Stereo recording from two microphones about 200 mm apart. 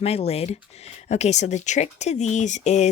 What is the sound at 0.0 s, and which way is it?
Speech, 30° left (ahead or behind).